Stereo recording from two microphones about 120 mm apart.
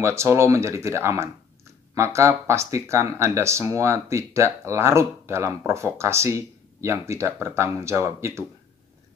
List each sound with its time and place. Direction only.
0.0 s speech: 25° right (ahead or behind)